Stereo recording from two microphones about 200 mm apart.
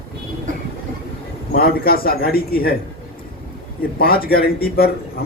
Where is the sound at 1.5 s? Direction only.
50° left (ahead or behind).